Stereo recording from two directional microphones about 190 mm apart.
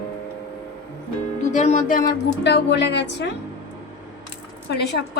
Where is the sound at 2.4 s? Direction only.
65° left (ahead or behind).